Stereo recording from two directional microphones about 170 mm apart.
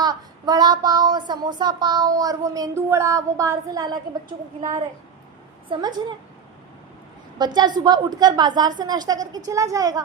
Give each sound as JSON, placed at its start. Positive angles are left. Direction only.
{"t": 0.0, "sound": "speech", "side_deg": -25}
{"t": 5.6, "sound": "speech", "side_deg": -30}
{"t": 7.3, "sound": "speech", "side_deg": -25}